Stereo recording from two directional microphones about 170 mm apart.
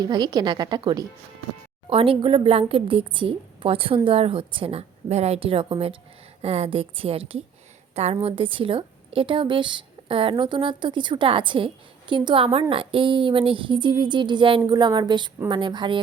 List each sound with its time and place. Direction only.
0.0 s a woman's voice: 25° right (ahead or behind)